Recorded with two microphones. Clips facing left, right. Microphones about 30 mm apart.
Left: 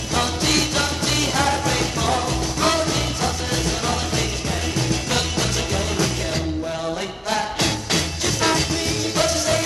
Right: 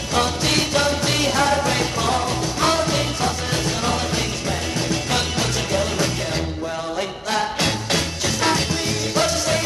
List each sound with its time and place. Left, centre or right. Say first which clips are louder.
0.1 s music: right 1 dB; right
7.3 s music: right 1 dB; right